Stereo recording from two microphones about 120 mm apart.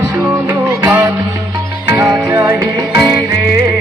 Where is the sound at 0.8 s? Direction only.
15° right (ahead or behind).